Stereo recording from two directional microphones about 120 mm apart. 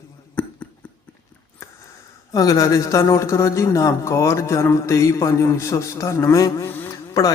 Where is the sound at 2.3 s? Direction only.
30° left (ahead or behind).